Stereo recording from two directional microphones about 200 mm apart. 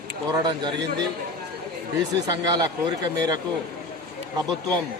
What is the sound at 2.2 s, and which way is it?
Speech, 20° right (ahead or behind).